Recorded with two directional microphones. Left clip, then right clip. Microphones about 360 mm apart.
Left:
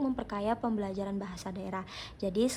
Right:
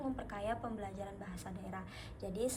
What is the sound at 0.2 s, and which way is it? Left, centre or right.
Speech, centre.